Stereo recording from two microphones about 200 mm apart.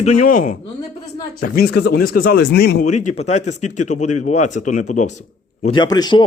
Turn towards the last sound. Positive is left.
turn(degrees=20)  # may be behind; listen again after turning